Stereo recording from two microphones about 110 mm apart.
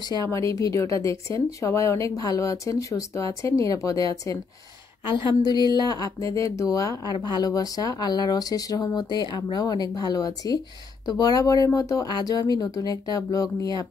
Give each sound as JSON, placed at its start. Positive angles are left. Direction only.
{"t": 0.1, "sound": "a woman's voice", "side_deg": 35}
{"t": 5.0, "sound": "speech", "side_deg": 50}